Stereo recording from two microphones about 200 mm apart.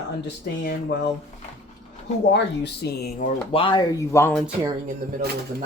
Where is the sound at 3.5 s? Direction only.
25° left (ahead or behind).